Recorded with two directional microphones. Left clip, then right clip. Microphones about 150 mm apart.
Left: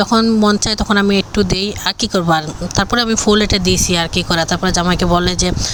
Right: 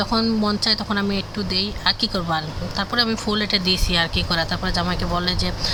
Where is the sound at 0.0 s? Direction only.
45° left (ahead or behind).